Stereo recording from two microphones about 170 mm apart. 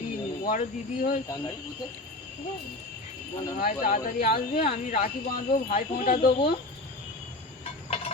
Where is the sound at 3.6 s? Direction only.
50° left (ahead or behind).